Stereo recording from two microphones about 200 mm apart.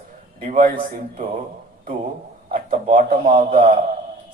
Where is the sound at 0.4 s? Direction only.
40° right (ahead or behind).